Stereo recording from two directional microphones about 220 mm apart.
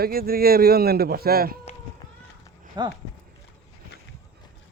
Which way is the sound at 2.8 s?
20° right (ahead or behind).